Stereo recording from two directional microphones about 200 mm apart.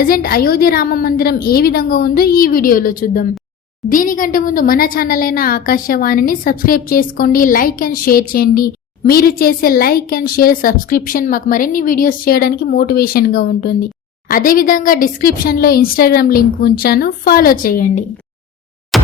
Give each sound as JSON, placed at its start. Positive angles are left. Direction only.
{"t": 0.0, "sound": "a woman's voice", "side_deg": 45}
{"t": 18.9, "sound": "plop", "side_deg": 0}